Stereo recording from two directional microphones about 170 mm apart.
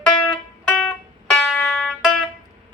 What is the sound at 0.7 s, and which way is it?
Music, 5° left (ahead or behind).